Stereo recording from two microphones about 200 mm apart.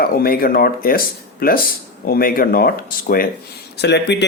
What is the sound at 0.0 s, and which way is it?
Speech, 50° left (ahead or behind).